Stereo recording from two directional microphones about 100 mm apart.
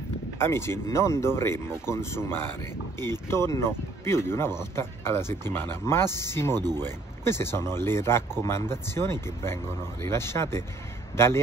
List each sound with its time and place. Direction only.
0.4 s speech: 25° left (ahead or behind)
6.5 s speech: 40° right (ahead or behind)
6.8 s speech: 25° left (ahead or behind)